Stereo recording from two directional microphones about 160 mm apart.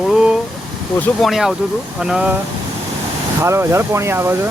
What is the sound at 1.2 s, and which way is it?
Speech, centre (ahead or behind).